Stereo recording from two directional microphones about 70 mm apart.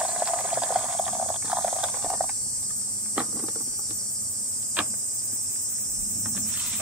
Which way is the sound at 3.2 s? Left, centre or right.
Centre.